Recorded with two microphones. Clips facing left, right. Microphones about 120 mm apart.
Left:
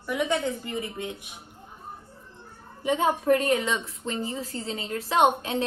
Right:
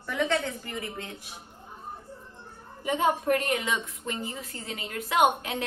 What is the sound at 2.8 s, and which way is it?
A woman's voice, 30° left (ahead or behind).